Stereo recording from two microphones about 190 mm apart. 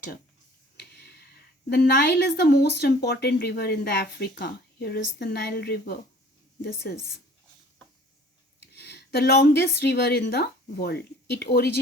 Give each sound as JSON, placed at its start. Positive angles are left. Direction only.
{"t": 0.8, "sound": "speech", "side_deg": 60}
{"t": 8.7, "sound": "a woman's voice", "side_deg": 60}